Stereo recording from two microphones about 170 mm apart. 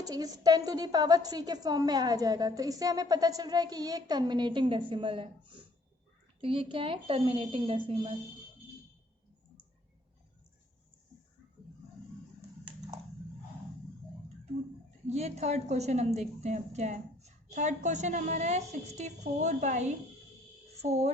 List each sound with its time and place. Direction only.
0.0 s a woman's voice: 20° right (ahead or behind)
15.0 s a woman's voice: 40° right (ahead or behind)